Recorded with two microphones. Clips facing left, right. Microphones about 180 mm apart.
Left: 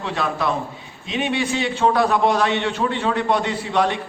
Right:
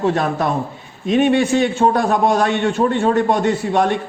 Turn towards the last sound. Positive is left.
turn(degrees=-50)  # may be behind; listen again after turning